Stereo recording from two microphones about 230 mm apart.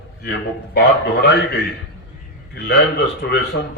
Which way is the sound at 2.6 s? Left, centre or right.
Left.